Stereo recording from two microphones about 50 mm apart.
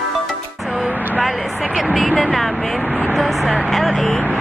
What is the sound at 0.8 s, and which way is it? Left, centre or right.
Vehicle, right.